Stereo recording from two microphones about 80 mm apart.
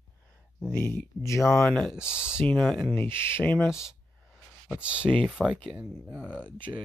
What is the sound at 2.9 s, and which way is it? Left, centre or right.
Speech, left.